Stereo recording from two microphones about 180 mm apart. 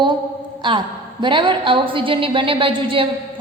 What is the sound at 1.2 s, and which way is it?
A woman's voice, 25° right (ahead or behind).